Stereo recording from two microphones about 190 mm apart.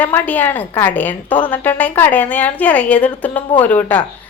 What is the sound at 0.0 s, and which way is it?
A woman's voice, 10° left (ahead or behind).